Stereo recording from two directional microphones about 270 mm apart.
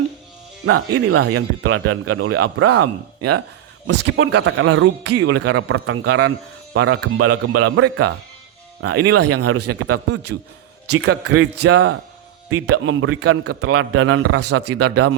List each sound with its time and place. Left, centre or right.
0.6 s a man's voice: right